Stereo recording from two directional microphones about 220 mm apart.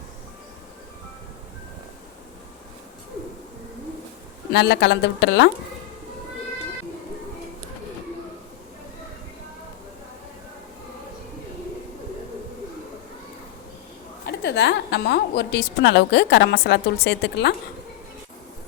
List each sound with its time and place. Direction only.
4.5 s a woman's voice: 50° left (ahead or behind)
14.3 s a woman's voice: 50° left (ahead or behind)